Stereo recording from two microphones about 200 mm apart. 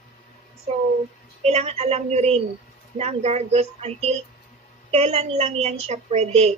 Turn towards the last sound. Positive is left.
turn(degrees=-30)  # may be behind; listen again after turning